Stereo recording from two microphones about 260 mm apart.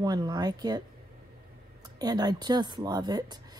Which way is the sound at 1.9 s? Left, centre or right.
Centre.